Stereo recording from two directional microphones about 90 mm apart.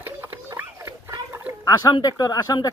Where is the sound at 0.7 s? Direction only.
35° right (ahead or behind).